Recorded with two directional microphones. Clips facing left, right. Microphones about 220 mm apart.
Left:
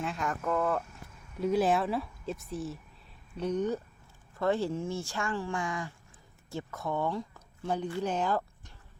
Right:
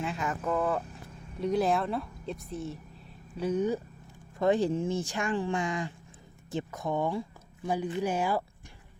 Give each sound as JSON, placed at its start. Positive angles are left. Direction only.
{"t": 0.0, "sound": "a woman's voice", "side_deg": 0}